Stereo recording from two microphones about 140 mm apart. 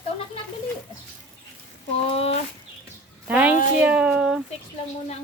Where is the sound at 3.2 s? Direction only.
10° right (ahead or behind).